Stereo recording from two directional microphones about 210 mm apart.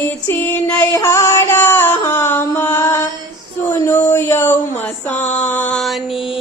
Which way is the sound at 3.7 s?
10° left (ahead or behind).